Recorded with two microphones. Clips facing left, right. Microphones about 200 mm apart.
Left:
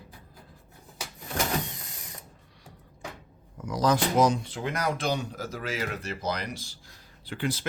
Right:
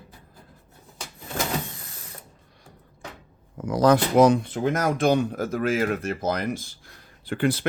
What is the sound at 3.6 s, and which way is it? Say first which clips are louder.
Speech: right 6 dB; 55° right (ahead or behind).